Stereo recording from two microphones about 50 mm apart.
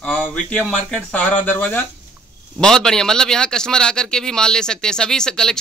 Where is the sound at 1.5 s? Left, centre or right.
Left.